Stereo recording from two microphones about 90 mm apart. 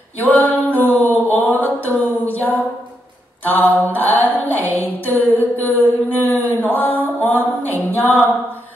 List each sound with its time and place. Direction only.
0.2 s singing: 20° left (ahead or behind)
1.0 s a sound: 20° left (ahead or behind)
3.4 s music: 20° left (ahead or behind)
5.6 s mantra: 20° left (ahead or behind)